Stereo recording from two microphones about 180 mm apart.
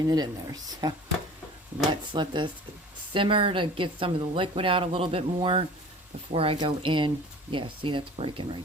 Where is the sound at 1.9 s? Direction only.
25° right (ahead or behind).